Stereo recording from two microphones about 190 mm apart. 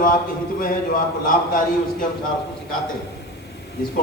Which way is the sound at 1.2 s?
45° left (ahead or behind).